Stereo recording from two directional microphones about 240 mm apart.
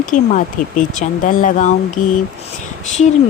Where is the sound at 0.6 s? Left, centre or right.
Left.